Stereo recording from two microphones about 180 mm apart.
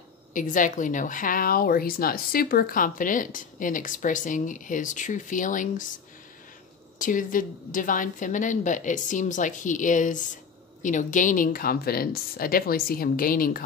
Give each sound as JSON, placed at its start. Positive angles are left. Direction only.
{"t": 0.3, "sound": "speech", "side_deg": 45}
{"t": 7.0, "sound": "speech", "side_deg": 45}